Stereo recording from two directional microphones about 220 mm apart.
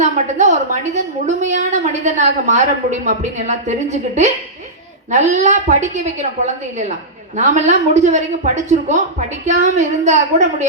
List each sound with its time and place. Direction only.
0.0 s a woman's voice: 35° right (ahead or behind)